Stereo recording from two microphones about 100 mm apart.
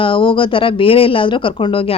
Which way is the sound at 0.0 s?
60° left (ahead or behind).